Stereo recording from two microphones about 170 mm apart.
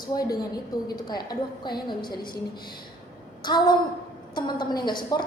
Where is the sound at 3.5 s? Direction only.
25° left (ahead or behind).